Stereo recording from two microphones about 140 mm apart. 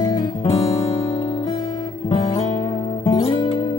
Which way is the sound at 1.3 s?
35° left (ahead or behind).